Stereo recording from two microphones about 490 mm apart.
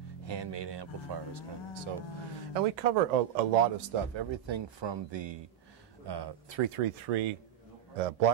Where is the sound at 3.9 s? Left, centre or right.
Right.